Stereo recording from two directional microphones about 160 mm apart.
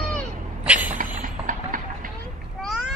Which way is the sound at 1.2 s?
55° right (ahead or behind).